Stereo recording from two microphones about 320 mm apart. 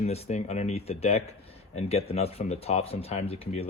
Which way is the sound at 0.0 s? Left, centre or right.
Centre.